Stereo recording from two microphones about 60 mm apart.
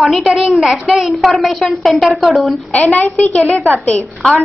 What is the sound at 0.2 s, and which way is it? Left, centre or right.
A woman's voice, centre.